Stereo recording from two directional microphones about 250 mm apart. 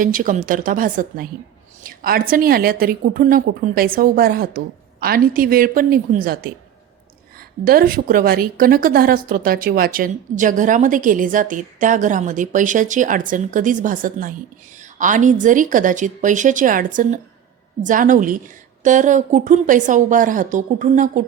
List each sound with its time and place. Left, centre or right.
0.0 s a woman's voice: right
7.6 s a woman's voice: right